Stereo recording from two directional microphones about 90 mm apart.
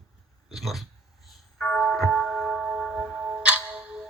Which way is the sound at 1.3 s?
Centre (ahead or behind).